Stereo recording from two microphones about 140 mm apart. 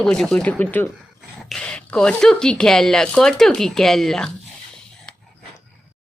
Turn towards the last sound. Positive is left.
turn(degrees=5)  # may be behind; listen again after turning